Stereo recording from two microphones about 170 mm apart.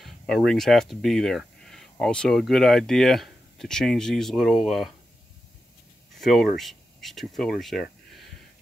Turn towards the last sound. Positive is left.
turn(degrees=0)  # may be behind; listen again after turning